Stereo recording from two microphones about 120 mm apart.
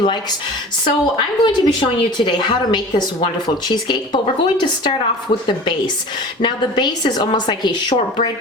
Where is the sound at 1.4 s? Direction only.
40° left (ahead or behind).